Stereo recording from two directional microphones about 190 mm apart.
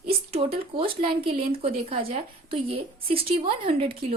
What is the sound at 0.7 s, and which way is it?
A woman's voice, 30° right (ahead or behind).